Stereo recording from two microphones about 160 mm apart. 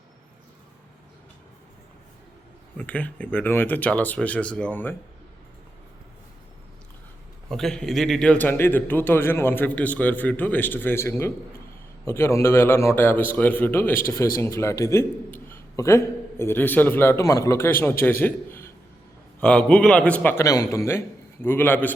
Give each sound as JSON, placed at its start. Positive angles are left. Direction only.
{"t": 2.7, "sound": "a man's voice", "side_deg": 10}
{"t": 7.5, "sound": "a man's voice", "side_deg": 5}